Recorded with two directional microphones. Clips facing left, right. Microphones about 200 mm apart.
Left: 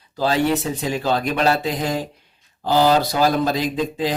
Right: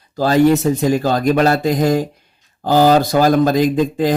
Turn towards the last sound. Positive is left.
turn(degrees=-50)  # may be behind; listen again after turning